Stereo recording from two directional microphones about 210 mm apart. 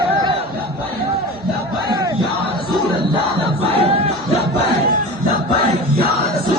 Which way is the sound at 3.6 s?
25° right (ahead or behind).